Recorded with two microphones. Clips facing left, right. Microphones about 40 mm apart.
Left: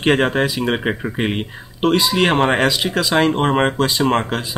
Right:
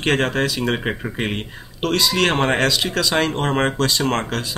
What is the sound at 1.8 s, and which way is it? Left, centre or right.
Speech, centre.